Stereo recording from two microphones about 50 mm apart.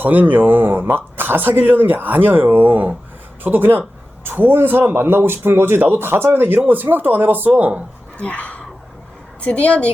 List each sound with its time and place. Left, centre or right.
0.0 s speech: right
8.2 s a woman's voice: left